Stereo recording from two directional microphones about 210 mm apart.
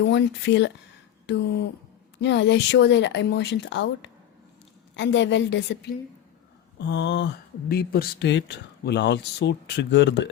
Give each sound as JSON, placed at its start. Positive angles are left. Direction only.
{"t": 0.0, "sound": "speech", "side_deg": 55}